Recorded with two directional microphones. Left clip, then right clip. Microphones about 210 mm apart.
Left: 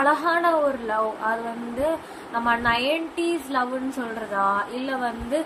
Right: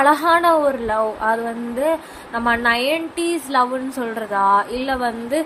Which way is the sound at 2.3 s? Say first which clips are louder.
Right 4 dB; 40° right (ahead or behind).